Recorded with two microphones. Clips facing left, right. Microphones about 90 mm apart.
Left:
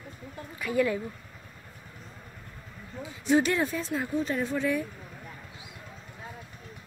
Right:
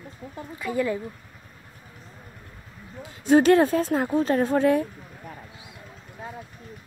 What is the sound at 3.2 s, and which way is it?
Speech, 45° right (ahead or behind).